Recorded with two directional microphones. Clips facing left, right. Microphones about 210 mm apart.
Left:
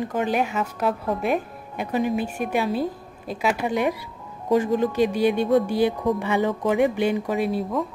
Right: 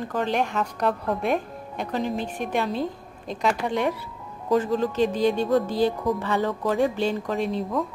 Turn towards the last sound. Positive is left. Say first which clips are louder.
# left 2 dB
turn(degrees=5)  # may be behind; listen again after turning